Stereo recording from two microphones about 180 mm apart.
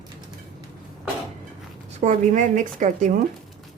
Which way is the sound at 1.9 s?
45° right (ahead or behind).